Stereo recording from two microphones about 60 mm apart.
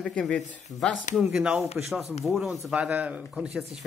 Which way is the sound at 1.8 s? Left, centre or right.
Centre.